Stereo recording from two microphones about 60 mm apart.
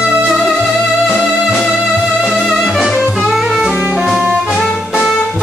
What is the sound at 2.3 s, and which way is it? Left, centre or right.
Music, centre.